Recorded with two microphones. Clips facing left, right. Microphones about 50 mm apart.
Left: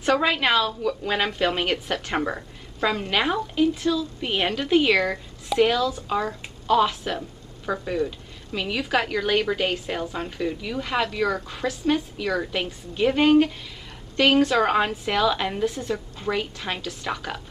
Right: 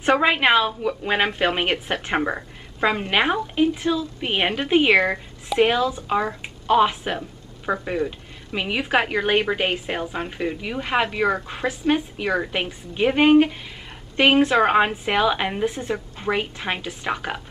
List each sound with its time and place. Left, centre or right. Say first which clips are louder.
0.0 s speech: right 3 dB; right